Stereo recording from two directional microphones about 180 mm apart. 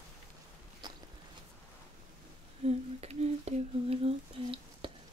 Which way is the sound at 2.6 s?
35° right (ahead or behind).